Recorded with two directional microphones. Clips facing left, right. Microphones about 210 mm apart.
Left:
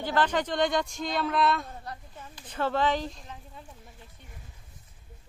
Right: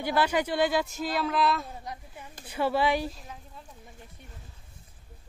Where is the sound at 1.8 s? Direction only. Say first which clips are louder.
Right 1 dB; 15° right (ahead or behind).